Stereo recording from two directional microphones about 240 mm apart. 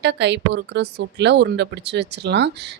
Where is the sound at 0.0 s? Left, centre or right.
Right.